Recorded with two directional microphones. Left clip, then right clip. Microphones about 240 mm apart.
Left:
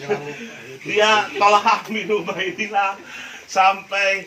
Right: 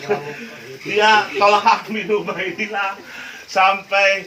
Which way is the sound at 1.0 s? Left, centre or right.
Centre.